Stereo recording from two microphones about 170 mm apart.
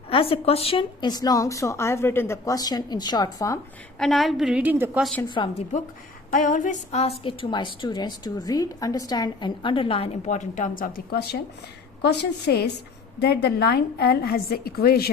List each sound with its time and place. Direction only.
0.1 s a woman's voice: 35° left (ahead or behind)
3.9 s a woman's voice: centre (ahead or behind)
5.3 s a woman's voice: 25° left (ahead or behind)
6.3 s a sound: 50° left (ahead or behind)
7.3 s a woman's voice: 30° left (ahead or behind); by 15.1 s 65° left (ahead or behind)